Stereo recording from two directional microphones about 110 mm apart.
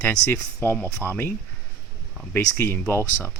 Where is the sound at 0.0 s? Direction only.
20° left (ahead or behind).